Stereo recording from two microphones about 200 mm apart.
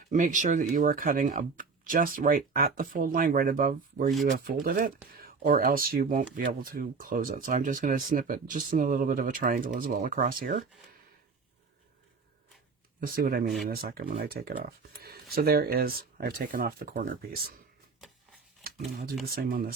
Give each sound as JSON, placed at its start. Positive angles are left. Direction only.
{"t": 0.1, "sound": "speech", "side_deg": -40}
{"t": 13.0, "sound": "speech", "side_deg": -45}
{"t": 19.3, "sound": "speech", "side_deg": -45}